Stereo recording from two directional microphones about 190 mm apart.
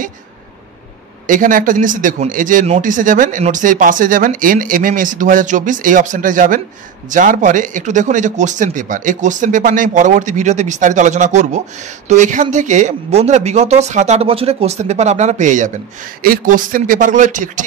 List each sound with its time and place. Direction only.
1.2 s speech: 45° right (ahead or behind)